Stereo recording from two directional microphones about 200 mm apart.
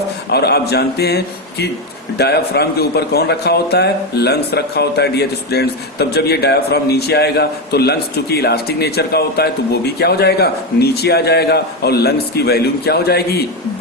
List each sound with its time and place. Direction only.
0.3 s a man's voice: 55° left (ahead or behind)